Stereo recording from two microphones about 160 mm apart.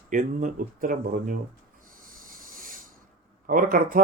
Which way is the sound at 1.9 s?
60° right (ahead or behind).